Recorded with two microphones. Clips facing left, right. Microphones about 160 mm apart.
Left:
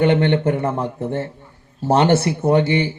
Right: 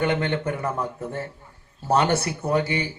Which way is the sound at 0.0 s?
25° left (ahead or behind).